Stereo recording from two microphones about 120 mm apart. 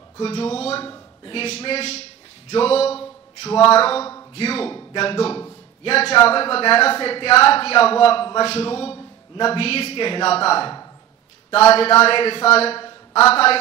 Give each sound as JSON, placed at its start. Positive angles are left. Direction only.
{"t": 0.2, "sound": "speech", "side_deg": 55}
{"t": 11.7, "sound": "speech", "side_deg": 55}